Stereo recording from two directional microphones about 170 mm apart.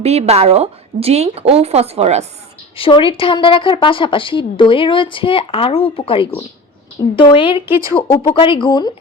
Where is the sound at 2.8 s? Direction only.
30° left (ahead or behind).